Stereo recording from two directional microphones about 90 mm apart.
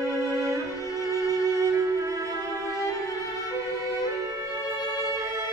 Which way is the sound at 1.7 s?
35° right (ahead or behind).